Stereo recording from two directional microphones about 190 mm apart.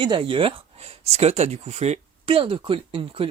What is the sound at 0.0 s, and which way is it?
Speech, 25° right (ahead or behind).